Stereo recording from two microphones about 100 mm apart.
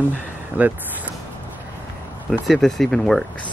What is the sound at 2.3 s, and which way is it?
Speech, 5° left (ahead or behind).